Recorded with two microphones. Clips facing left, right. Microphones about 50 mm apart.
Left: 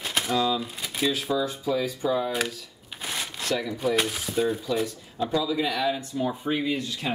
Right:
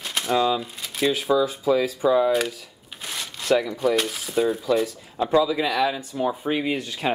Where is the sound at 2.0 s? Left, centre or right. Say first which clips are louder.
Right 7 dB; right.